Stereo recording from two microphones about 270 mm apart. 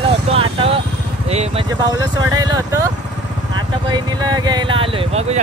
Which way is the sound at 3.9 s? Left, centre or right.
Centre.